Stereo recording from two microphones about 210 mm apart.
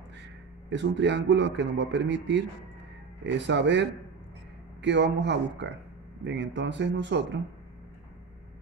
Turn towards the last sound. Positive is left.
turn(degrees=-55)  # may be behind; listen again after turning